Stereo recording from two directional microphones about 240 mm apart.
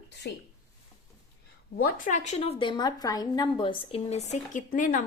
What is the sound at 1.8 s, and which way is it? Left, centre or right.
A woman's voice, left.